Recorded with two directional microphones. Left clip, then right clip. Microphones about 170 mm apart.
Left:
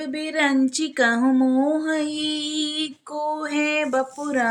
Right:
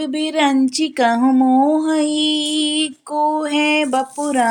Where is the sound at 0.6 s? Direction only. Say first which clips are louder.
Right 4 dB; 15° right (ahead or behind).